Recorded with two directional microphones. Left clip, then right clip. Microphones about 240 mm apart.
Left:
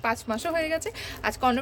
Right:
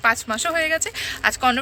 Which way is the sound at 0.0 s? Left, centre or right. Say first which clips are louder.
Right 7 dB; centre.